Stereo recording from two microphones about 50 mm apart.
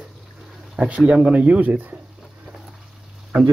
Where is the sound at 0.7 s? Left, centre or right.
Centre.